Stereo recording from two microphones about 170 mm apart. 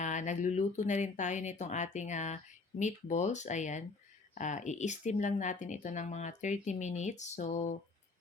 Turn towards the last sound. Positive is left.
turn(degrees=45)  # may be behind; listen again after turning